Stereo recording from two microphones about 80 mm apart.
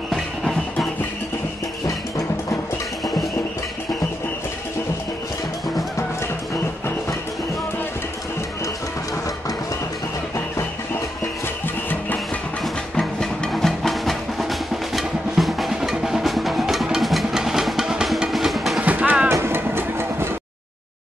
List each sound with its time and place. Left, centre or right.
0.1 s music: centre
13.0 s music: centre
18.8 s music: centre
19.3 s vehicle: right